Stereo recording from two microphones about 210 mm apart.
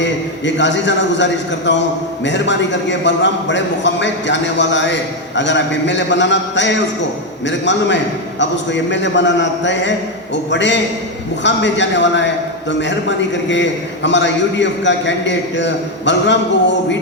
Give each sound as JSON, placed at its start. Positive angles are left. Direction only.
{"t": 0.0, "sound": "a man's voice", "side_deg": 60}